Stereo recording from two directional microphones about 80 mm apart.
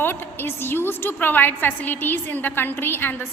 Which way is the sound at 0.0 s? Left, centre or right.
Left.